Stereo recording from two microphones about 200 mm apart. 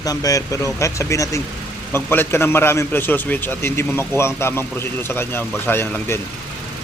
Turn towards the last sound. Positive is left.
turn(degrees=10)  # may be behind; listen again after turning